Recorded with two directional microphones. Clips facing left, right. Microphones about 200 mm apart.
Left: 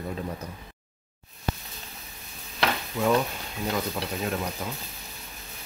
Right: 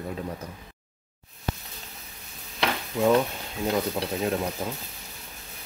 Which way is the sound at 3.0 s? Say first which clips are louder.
Right 3 dB; 25° right (ahead or behind).